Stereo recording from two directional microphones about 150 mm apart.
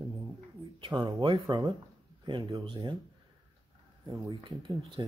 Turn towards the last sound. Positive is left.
turn(degrees=-30)  # may be behind; listen again after turning